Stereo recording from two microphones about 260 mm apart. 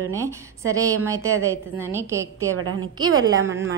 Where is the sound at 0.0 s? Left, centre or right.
Centre.